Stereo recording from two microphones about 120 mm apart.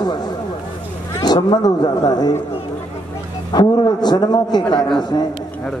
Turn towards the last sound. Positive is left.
turn(degrees=5)  # may be behind; listen again after turning